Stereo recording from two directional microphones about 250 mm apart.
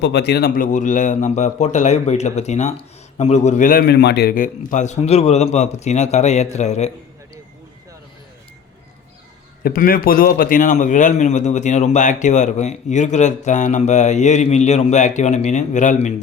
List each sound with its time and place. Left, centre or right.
0.0 s a man's voice: left
9.6 s a man's voice: left